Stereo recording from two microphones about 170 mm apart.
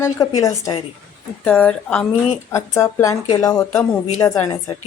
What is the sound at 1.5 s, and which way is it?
Speech, 10° left (ahead or behind).